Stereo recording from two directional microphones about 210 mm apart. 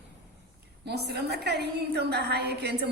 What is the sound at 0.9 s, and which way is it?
A woman's voice, 50° right (ahead or behind).